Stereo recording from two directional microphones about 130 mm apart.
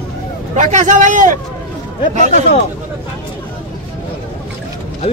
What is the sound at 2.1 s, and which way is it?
Speech, 65° right (ahead or behind).